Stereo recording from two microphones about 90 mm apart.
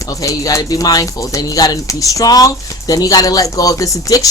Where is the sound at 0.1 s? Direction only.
40° left (ahead or behind).